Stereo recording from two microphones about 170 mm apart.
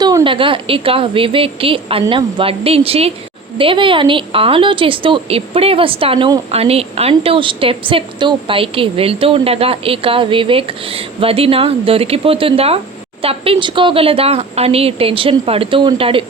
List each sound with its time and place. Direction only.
0.0 s a woman's voice: 25° right (ahead or behind)